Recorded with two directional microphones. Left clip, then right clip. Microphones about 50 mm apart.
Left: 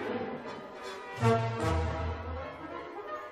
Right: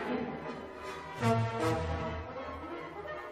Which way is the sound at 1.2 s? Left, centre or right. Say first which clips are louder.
Left 3 dB; left.